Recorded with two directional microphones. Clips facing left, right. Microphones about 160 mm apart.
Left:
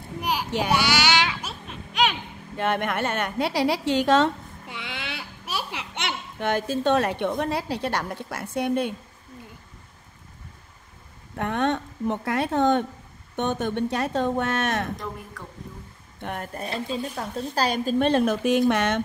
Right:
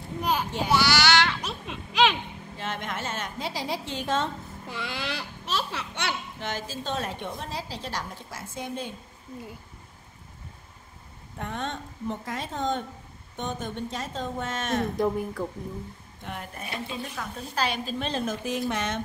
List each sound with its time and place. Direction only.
0.7 s baby cry: 15° left (ahead or behind)
2.5 s a woman's voice: 60° left (ahead or behind); by 4.3 s 75° left (ahead or behind)
4.6 s a child's voice: centre (ahead or behind); by 6.1 s 20° left (ahead or behind)
6.4 s a woman's voice: 60° left (ahead or behind)
11.3 s a woman's voice: 65° left (ahead or behind)
16.2 s speech: 55° left (ahead or behind)
16.5 s speech: 30° left (ahead or behind)
17.9 s a woman's voice: 55° left (ahead or behind)